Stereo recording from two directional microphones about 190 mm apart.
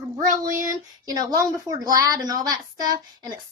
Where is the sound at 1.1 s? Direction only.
20° right (ahead or behind).